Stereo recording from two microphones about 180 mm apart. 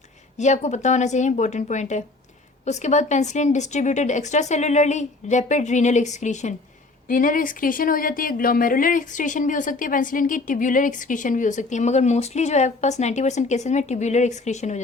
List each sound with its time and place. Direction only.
0.3 s speech: 40° left (ahead or behind)